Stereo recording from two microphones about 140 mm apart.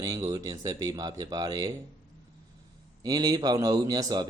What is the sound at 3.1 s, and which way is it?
Speech, 25° right (ahead or behind).